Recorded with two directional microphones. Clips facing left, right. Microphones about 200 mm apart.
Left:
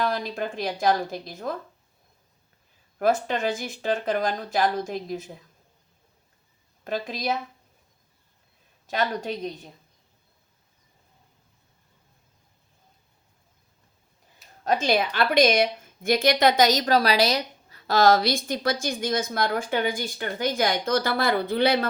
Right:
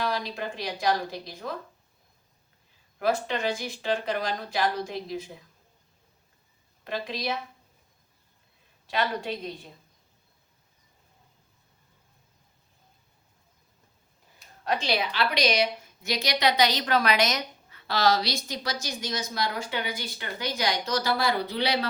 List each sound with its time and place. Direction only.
0.0 s a woman's voice: 50° left (ahead or behind)
3.0 s a woman's voice: 50° left (ahead or behind)
6.8 s a woman's voice: 45° left (ahead or behind)
8.9 s a woman's voice: 45° left (ahead or behind)
14.6 s a woman's voice: 45° left (ahead or behind)